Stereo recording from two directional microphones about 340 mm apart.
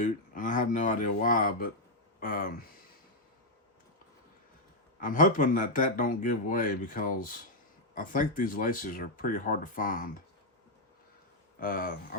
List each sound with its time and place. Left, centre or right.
0.0 s a man's voice: left
4.9 s a man's voice: left
11.6 s a man's voice: left